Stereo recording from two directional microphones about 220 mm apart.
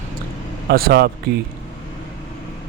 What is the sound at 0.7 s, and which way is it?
Speech, 45° right (ahead or behind).